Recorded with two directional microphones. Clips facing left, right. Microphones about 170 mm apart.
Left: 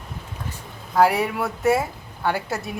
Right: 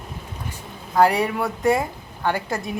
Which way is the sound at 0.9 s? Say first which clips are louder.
Right 1 dB; 5° left (ahead or behind).